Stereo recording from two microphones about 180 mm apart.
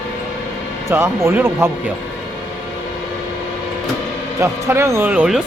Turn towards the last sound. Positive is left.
turn(degrees=-5)  # may be behind; listen again after turning